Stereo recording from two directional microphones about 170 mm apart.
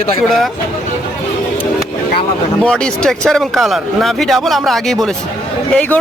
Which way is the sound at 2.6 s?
5° left (ahead or behind).